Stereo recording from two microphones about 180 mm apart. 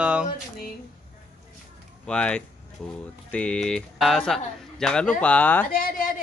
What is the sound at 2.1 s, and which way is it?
Speech, 5° left (ahead or behind).